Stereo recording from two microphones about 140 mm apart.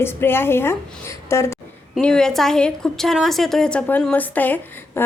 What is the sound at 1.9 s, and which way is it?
A woman's voice, 5° left (ahead or behind).